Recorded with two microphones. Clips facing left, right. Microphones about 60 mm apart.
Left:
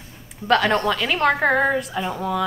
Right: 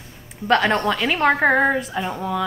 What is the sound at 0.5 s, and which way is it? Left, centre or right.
A woman's voice, centre.